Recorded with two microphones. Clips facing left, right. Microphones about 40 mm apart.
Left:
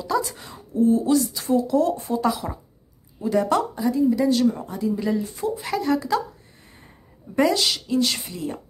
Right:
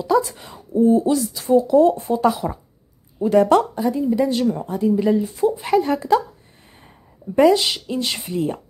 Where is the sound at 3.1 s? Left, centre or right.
Right.